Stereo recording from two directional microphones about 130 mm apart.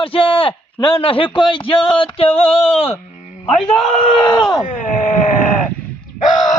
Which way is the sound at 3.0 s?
65° left (ahead or behind).